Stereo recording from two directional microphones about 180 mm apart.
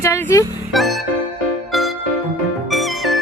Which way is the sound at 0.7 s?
Centre (ahead or behind).